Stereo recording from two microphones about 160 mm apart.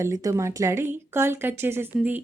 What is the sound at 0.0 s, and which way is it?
A woman's voice, 20° right (ahead or behind).